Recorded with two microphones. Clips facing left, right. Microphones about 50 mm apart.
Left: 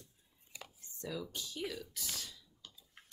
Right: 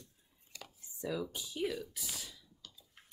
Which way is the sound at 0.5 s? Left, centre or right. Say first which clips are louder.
Even; centre.